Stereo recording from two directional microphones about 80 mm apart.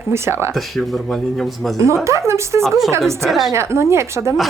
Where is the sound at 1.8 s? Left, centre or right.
Right.